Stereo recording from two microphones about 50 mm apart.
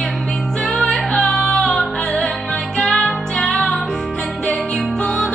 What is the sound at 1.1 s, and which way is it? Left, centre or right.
Music, centre.